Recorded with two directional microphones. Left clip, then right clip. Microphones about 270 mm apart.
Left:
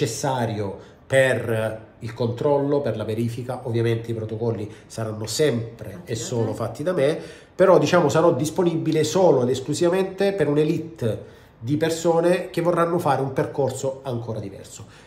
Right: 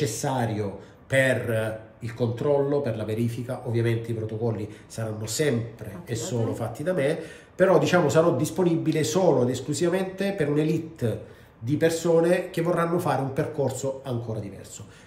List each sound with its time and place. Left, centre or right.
0.0 s speech: centre